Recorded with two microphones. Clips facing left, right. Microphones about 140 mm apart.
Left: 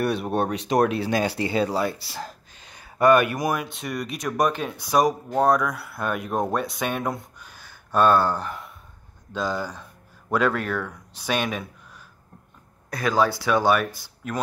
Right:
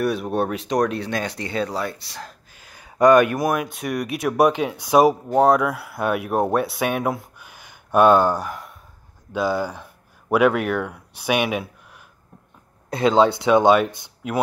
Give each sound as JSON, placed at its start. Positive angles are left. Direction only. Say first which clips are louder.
{"t": 0.0, "sound": "speech", "louder": "right 2 dB", "side_deg": 0}
{"t": 2.5, "sound": "a sound", "louder": "right 1 dB", "side_deg": -10}
{"t": 3.7, "sound": "speech", "louder": "right 5 dB", "side_deg": 0}
{"t": 12.9, "sound": "speech", "louder": "right 5 dB", "side_deg": -25}